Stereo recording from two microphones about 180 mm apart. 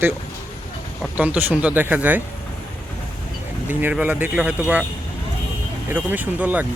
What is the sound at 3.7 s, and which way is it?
Speech, 10° right (ahead or behind).